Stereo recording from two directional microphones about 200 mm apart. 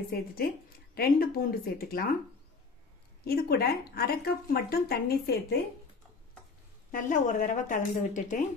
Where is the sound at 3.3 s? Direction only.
50° left (ahead or behind).